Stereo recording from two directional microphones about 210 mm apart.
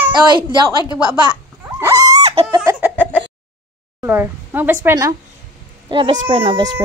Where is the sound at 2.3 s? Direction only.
25° right (ahead or behind).